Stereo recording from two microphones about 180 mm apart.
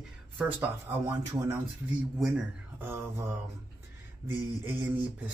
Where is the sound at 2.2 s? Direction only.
5° right (ahead or behind).